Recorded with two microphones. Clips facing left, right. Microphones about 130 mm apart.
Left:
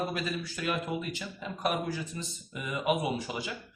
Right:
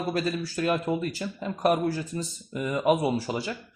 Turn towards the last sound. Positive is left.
turn(degrees=-35)  # may be behind; listen again after turning